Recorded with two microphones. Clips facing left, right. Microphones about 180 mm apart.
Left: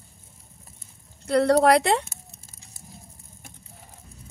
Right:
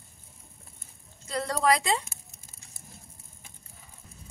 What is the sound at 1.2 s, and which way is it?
Speech, 65° left (ahead or behind).